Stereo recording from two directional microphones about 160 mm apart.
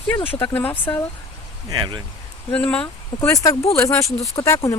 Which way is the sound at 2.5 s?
5° left (ahead or behind).